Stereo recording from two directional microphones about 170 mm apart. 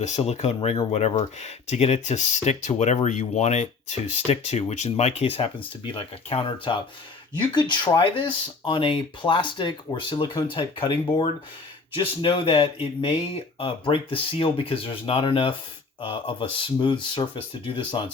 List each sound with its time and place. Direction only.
0.0 s speech: 40° left (ahead or behind)